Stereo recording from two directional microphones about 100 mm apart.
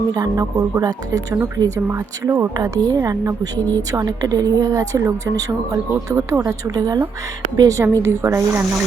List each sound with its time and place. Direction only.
0.1 s a woman's voice: 40° right (ahead or behind)
2.6 s a woman's voice: 40° right (ahead or behind)
3.6 s speech: 20° left (ahead or behind)
3.9 s a woman's voice: 40° right (ahead or behind)
6.5 s a woman's voice: 35° right (ahead or behind)